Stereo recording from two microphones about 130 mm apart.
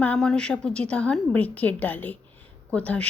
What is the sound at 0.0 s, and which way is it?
Speech, 5° left (ahead or behind).